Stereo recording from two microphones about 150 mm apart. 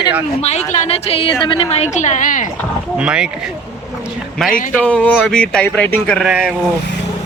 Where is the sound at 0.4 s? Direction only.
45° left (ahead or behind).